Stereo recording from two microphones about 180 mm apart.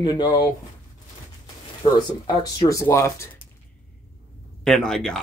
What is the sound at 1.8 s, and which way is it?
Speech, 25° left (ahead or behind).